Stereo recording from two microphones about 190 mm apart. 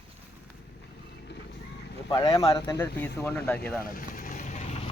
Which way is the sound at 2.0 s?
20° left (ahead or behind).